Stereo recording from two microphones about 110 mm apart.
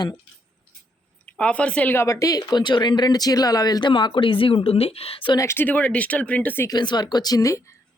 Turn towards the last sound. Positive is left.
turn(degrees=30)  # may be behind; listen again after turning